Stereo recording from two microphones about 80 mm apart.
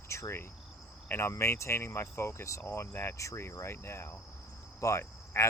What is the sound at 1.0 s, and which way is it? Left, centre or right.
Speech, left.